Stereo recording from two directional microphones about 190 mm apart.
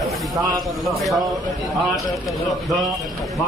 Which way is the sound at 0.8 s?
Centre (ahead or behind).